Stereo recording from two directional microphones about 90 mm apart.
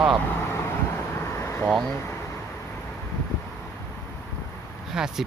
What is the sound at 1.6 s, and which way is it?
Speech, 5° left (ahead or behind).